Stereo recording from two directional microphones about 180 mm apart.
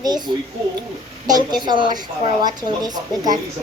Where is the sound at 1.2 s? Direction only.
20° right (ahead or behind).